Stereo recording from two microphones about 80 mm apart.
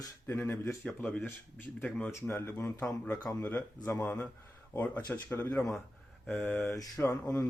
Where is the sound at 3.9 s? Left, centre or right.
Left.